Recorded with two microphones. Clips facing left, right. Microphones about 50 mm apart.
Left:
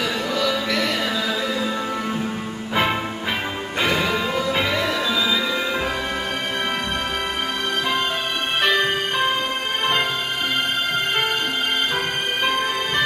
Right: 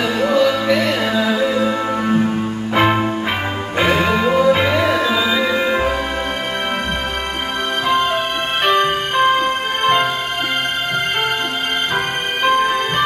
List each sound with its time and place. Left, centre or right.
0.2 s music: right
2.7 s music: right
4.0 s music: right
8.6 s music: centre
12.4 s music: right